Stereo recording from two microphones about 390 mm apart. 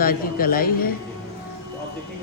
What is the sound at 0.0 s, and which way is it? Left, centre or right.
Speech, left.